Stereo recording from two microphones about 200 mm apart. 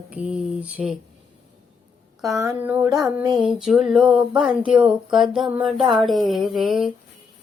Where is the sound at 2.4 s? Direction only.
15° right (ahead or behind).